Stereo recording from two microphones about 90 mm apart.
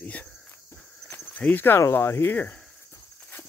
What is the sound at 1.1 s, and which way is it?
Speech, 20° left (ahead or behind).